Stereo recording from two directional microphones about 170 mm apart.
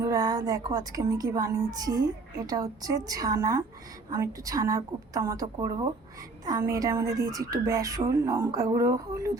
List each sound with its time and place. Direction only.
0.0 s a woman's voice: 20° right (ahead or behind)